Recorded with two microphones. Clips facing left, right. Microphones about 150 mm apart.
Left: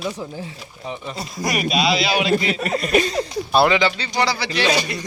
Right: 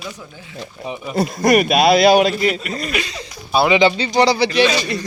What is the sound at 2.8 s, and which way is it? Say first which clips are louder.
Speech: left 5 dB; 40° left (ahead or behind).